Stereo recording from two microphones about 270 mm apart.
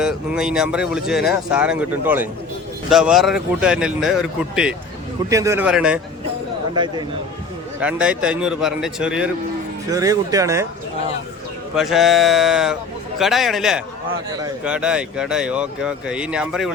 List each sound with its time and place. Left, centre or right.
0.0 s speech: centre
6.7 s speech: centre
7.8 s speech: centre
11.7 s speech: centre
14.3 s speech: centre